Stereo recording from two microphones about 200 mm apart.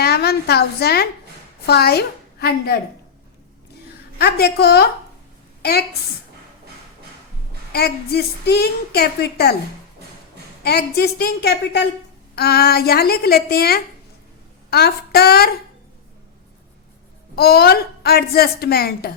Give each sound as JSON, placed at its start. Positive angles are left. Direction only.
{"t": 0.0, "sound": "a woman's voice", "side_deg": 50}
{"t": 4.2, "sound": "a woman's voice", "side_deg": 55}
{"t": 7.7, "sound": "a woman's voice", "side_deg": 50}
{"t": 10.6, "sound": "a woman's voice", "side_deg": 55}
{"t": 17.3, "sound": "a woman's voice", "side_deg": 50}